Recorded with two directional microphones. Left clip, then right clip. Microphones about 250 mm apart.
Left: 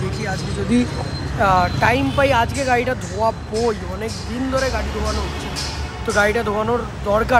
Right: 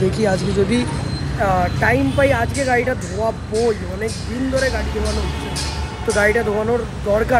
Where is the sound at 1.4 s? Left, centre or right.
Left.